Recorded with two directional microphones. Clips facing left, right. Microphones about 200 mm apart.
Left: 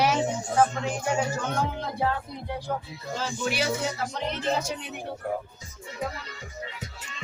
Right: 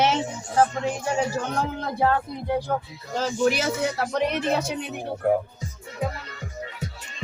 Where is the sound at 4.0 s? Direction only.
70° right (ahead or behind).